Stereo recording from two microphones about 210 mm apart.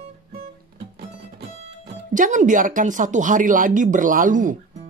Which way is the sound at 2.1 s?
35° right (ahead or behind).